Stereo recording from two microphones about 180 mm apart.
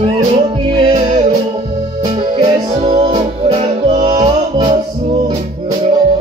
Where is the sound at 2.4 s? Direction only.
35° right (ahead or behind).